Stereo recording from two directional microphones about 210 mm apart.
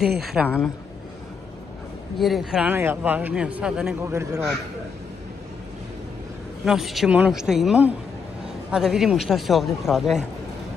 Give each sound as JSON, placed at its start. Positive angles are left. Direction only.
{"t": 0.2, "sound": "speech", "side_deg": 0}
{"t": 2.1, "sound": "speech", "side_deg": 0}
{"t": 4.1, "sound": "a man's voice", "side_deg": -15}
{"t": 6.6, "sound": "speech", "side_deg": 0}